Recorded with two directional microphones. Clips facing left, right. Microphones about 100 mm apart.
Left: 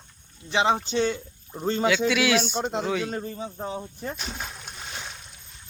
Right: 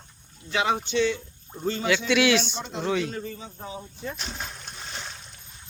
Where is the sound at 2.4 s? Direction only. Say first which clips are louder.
Left 6 dB; 50° left (ahead or behind).